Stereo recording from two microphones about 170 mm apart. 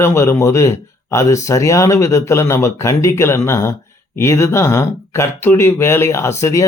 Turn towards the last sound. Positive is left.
turn(degrees=15)  # may be behind; listen again after turning